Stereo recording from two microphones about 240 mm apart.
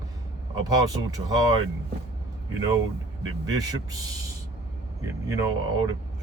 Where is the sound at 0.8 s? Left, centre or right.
Centre.